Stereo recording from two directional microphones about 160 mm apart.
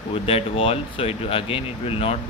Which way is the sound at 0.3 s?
35° left (ahead or behind).